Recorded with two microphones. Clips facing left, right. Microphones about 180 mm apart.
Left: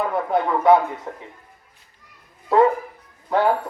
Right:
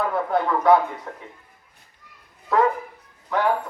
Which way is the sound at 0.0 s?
20° left (ahead or behind).